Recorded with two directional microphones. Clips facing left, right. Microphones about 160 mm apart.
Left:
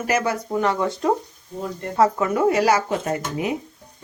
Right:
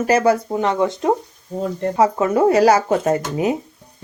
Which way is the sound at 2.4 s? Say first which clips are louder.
Right 5 dB; 35° right (ahead or behind).